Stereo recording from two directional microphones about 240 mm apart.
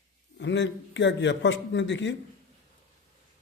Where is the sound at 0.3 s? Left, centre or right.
Left.